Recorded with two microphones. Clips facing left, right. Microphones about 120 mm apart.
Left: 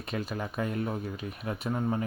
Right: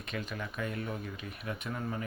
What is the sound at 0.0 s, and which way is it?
Speech, 35° left (ahead or behind).